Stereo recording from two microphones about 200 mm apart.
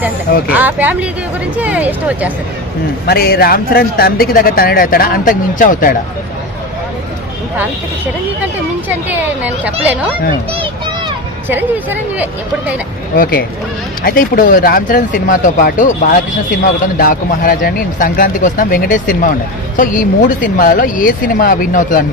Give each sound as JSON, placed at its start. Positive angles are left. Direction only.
{"t": 0.4, "sound": "speech", "side_deg": -10}
{"t": 3.1, "sound": "speech", "side_deg": 50}
{"t": 8.9, "sound": "speech", "side_deg": -5}
{"t": 14.0, "sound": "speech", "side_deg": 45}